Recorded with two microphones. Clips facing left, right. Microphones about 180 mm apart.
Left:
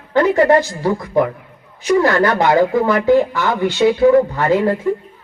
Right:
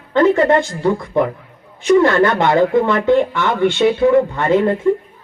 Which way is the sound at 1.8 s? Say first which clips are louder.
Right 2 dB; 25° right (ahead or behind).